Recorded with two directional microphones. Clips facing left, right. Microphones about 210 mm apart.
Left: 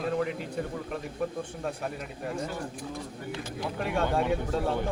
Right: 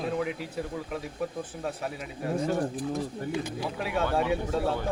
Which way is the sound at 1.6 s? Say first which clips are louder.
Right 1 dB; centre (ahead or behind).